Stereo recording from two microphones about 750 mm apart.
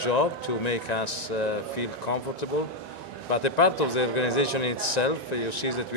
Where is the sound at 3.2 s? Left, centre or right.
Left.